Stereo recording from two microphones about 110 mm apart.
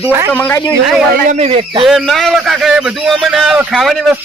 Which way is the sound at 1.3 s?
70° right (ahead or behind).